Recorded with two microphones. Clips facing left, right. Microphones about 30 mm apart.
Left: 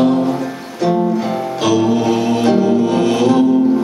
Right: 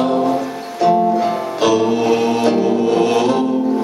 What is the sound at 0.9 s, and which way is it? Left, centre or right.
Music, centre.